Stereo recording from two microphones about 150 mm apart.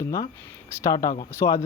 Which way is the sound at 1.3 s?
20° left (ahead or behind).